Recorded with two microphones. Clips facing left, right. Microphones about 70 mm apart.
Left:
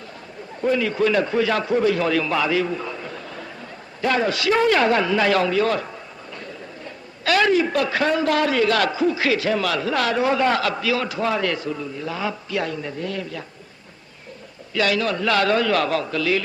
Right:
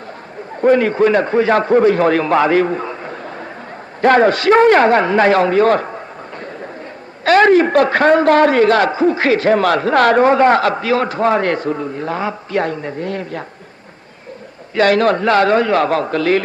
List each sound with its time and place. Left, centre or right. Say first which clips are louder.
0.6 s a man's voice: right 8 dB; right
4.0 s a man's voice: right 10 dB; right
14.8 s a man's voice: right 9 dB; right
15.3 s a man's voice: right 4 dB; right